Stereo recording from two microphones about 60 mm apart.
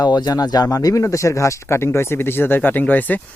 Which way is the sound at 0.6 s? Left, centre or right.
Left.